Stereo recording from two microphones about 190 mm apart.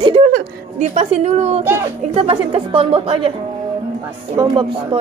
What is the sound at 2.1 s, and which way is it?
Speech, 30° right (ahead or behind).